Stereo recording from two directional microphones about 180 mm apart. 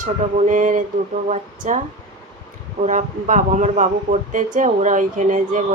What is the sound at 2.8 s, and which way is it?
Speech, 45° right (ahead or behind).